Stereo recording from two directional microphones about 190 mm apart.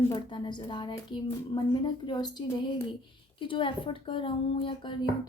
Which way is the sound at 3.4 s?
25° left (ahead or behind).